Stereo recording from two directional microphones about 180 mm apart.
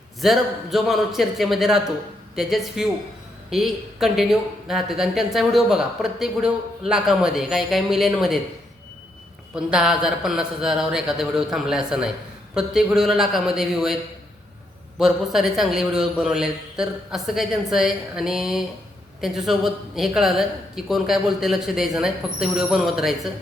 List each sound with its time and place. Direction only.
0.2 s speech: centre (ahead or behind)
9.6 s speech: 5° right (ahead or behind)